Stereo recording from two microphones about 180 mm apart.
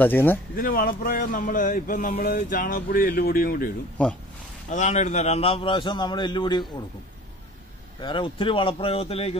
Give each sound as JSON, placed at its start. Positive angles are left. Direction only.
{"t": 0.0, "sound": "speech", "side_deg": 10}
{"t": 0.6, "sound": "speech", "side_deg": 55}
{"t": 4.0, "sound": "speech", "side_deg": 5}
{"t": 4.6, "sound": "a man's voice", "side_deg": 40}
{"t": 8.0, "sound": "a man's voice", "side_deg": 30}